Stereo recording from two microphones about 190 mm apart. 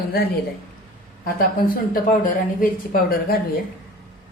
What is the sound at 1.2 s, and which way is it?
A woman's voice, 50° left (ahead or behind).